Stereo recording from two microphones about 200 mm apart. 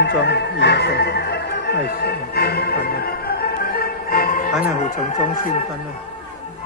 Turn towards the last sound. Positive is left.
turn(degrees=40)  # may be behind; listen again after turning